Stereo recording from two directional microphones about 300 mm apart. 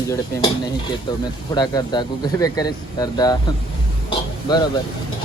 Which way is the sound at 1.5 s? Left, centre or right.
Centre.